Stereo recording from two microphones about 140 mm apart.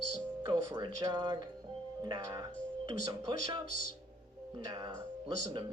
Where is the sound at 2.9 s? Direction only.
30° right (ahead or behind).